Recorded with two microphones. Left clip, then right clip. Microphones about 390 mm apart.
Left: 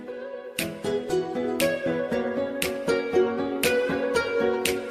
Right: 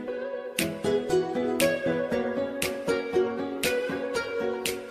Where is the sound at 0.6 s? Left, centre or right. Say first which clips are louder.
Right 1 dB; centre; by 4.7 s left.